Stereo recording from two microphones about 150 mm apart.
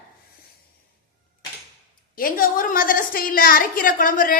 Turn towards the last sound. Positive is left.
turn(degrees=65)  # may be behind; listen again after turning